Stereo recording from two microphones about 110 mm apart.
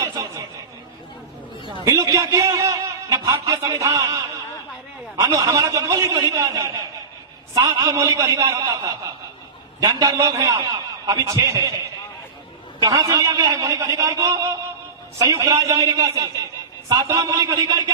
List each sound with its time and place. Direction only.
1.8 s a man's voice: 30° right (ahead or behind)
12.8 s a man's voice: 30° right (ahead or behind)